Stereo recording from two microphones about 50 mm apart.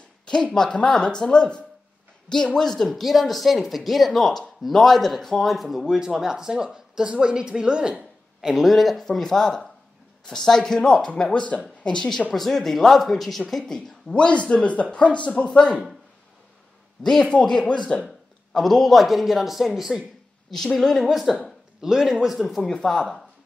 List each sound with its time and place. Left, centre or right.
0.2 s a sound: centre
0.7 s a woman's voice: centre
5.9 s speech: centre
8.5 s a woman's voice: centre
12.3 s a woman's voice: centre
14.1 s speech: left
17.0 s a woman's voice: centre
18.5 s speech: centre
20.5 s speech: centre
22.4 s a woman's voice: centre